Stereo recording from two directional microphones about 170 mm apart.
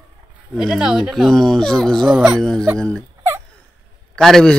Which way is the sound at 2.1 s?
10° right (ahead or behind).